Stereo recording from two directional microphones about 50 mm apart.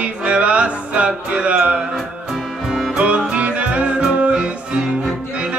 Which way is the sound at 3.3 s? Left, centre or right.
Right.